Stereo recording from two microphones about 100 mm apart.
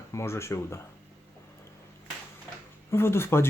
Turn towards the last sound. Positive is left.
turn(degrees=25)  # may be behind; listen again after turning